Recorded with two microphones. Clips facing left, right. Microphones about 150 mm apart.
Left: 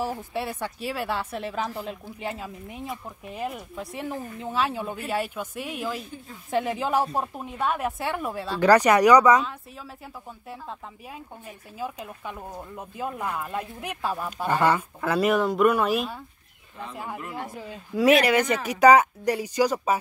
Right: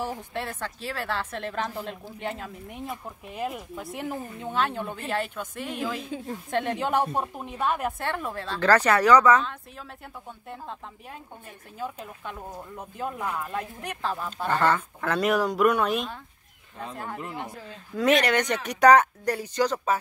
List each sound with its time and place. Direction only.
0.0 s a woman's voice: 10° left (ahead or behind)
6.0 s speech: 90° right
6.5 s speech: 5° left (ahead or behind)
11.8 s speech: 5° left (ahead or behind)